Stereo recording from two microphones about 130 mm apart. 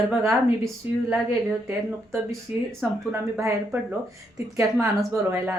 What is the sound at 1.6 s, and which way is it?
Speech, 15° right (ahead or behind).